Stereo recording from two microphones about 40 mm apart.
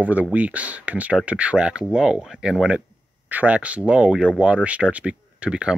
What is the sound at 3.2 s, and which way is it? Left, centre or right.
Speech, right.